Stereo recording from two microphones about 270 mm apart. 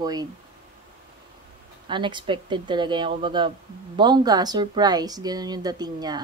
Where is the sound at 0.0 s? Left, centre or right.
Centre.